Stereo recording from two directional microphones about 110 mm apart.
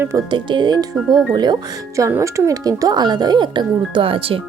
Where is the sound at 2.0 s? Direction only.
25° right (ahead or behind); by 4.4 s 55° right (ahead or behind).